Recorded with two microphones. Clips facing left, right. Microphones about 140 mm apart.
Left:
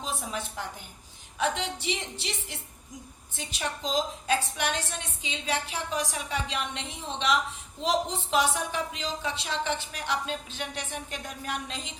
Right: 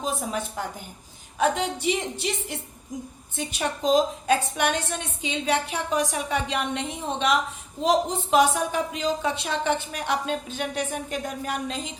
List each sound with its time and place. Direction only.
0.0 s a woman's voice: 45° right (ahead or behind)